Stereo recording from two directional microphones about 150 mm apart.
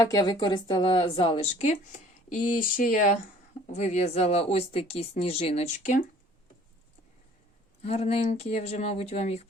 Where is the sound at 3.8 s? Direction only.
50° left (ahead or behind).